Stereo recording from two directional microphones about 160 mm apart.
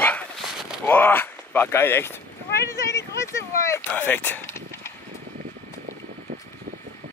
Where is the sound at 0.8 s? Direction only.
15° left (ahead or behind).